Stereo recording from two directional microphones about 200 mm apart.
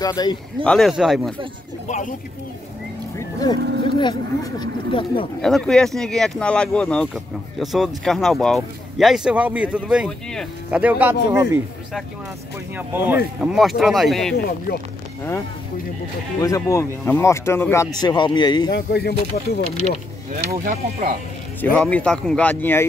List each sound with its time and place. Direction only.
0.0 s speech: 20° left (ahead or behind)
0.7 s speech: centre (ahead or behind)
1.9 s speech: 40° left (ahead or behind)
3.2 s vehicle: 15° left (ahead or behind)
3.8 s speech: 20° left (ahead or behind)
5.4 s speech: 5° left (ahead or behind); by 11.6 s 15° right (ahead or behind)
12.7 s speech: 10° right (ahead or behind)
14.7 s speech: 50° left (ahead or behind)
16.3 s speech: 15° left (ahead or behind)
18.7 s speech: 55° left (ahead or behind)
20.3 s speech: 45° right (ahead or behind)
21.5 s speech: 5° left (ahead or behind)